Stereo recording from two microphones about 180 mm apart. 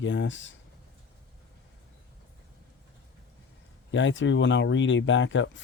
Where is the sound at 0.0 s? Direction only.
90° left.